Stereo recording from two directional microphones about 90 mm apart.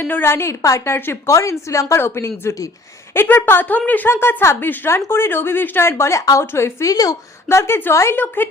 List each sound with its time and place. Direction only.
0.0 s speech: 25° left (ahead or behind)
1.4 s a woman's voice: 35° left (ahead or behind)
3.2 s speech: 25° left (ahead or behind)
6.9 s speech: 45° left (ahead or behind)
7.4 s speech: 30° left (ahead or behind)